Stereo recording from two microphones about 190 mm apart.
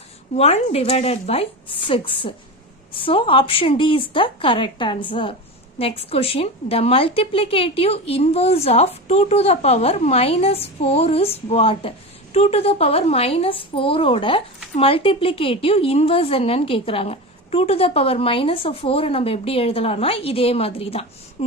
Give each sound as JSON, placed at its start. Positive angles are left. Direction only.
{"t": 0.3, "sound": "a woman's voice", "side_deg": 35}